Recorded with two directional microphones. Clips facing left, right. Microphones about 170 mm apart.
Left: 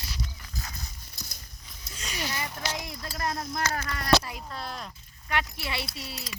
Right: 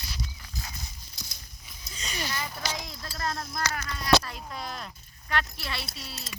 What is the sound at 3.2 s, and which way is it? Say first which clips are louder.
Speech: left 1 dB; 15° left (ahead or behind).